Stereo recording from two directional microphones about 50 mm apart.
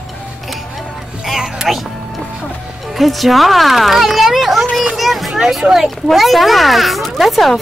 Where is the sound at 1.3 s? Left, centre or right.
Centre.